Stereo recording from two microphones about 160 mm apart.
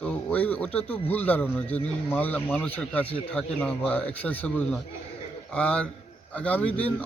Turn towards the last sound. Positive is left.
turn(degrees=10)  # may be behind; listen again after turning